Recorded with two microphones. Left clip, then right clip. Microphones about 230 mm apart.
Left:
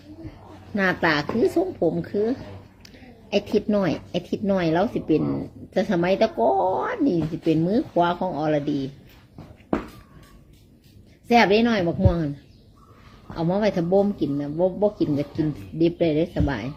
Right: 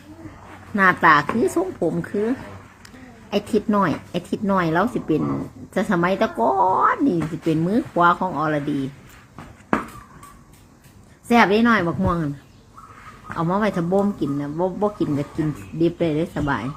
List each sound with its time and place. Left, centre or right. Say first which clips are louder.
0.8 s speech: right 7 dB; centre
11.3 s speech: right 2 dB; centre
13.3 s speech: right 1 dB; centre